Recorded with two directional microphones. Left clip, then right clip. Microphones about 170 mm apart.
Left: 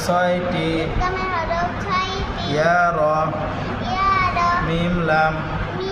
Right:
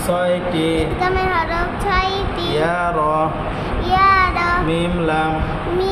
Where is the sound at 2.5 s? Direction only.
20° right (ahead or behind).